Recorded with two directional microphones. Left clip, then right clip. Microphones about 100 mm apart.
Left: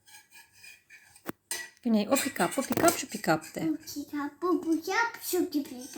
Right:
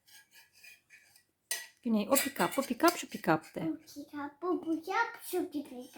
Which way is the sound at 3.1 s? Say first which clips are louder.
Left 2 dB; 50° right (ahead or behind).